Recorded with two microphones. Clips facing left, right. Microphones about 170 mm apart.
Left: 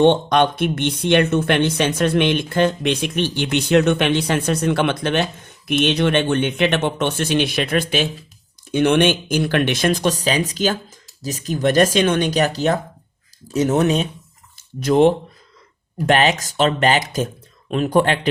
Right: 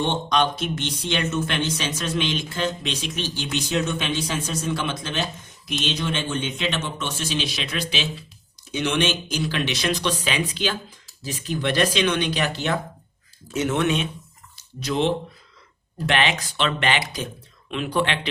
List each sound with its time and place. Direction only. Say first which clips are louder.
0.0 s speech: left 8 dB; 60° left (ahead or behind); by 14.1 s 40° left (ahead or behind)
14.8 s speech: left 9 dB; 50° left (ahead or behind)